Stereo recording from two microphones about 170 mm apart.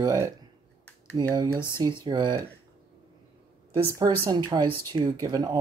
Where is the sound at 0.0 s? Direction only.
20° right (ahead or behind).